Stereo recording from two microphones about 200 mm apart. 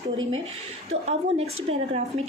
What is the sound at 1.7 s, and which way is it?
Speech, 30° right (ahead or behind).